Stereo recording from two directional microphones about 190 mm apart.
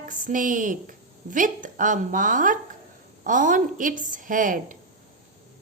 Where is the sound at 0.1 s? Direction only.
40° right (ahead or behind).